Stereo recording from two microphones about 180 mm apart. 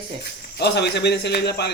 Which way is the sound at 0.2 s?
65° left (ahead or behind).